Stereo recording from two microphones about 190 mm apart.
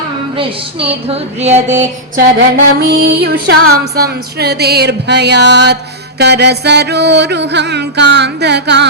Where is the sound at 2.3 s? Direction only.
55° right (ahead or behind).